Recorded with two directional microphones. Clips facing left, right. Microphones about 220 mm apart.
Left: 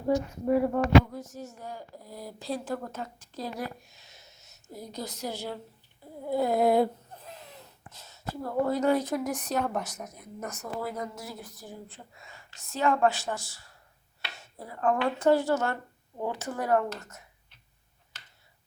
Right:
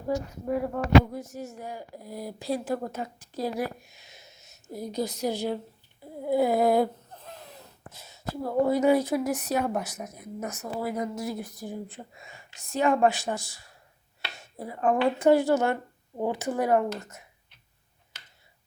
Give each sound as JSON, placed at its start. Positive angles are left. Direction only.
{"t": 0.4, "sound": "speech", "side_deg": 5}
{"t": 0.8, "sound": "a woman's voice", "side_deg": -10}
{"t": 3.9, "sound": "a sound", "side_deg": -15}
{"t": 4.7, "sound": "a woman's voice", "side_deg": -15}
{"t": 6.2, "sound": "a sound", "side_deg": -10}
{"t": 7.9, "sound": "a woman's voice", "side_deg": -10}